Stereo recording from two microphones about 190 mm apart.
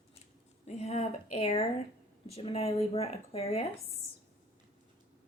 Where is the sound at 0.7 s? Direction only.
35° left (ahead or behind).